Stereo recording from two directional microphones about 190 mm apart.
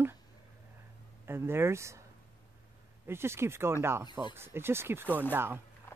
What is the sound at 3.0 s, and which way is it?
Speech, 15° right (ahead or behind).